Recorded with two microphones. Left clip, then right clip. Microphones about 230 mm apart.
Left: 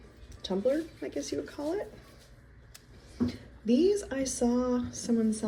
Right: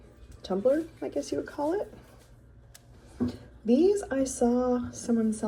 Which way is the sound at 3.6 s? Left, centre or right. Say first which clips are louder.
Right 3 dB; centre.